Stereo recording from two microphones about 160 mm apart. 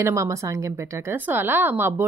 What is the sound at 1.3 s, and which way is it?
Speech, 15° right (ahead or behind).